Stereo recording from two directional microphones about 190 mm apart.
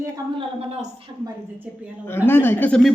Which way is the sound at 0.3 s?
35° right (ahead or behind).